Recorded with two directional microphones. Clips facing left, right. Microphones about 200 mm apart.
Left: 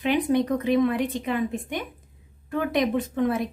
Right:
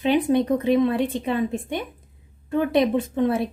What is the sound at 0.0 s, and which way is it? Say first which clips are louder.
Speech: right 3 dB; 30° right (ahead or behind).